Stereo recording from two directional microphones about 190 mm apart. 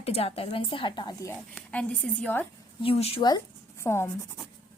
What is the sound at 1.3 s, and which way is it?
Speech, 5° left (ahead or behind).